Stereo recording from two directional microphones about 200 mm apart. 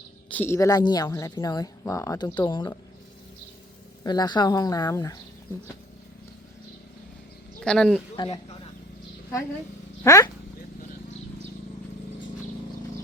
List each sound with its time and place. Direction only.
0.3 s speech: 10° left (ahead or behind)
4.0 s speech: 20° left (ahead or behind)
7.6 s speech: 5° left (ahead or behind)
8.1 s a man's voice: 20° left (ahead or behind)
10.0 s speech: 15° left (ahead or behind)